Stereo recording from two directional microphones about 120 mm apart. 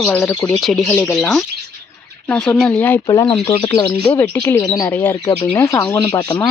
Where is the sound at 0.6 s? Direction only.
Centre (ahead or behind).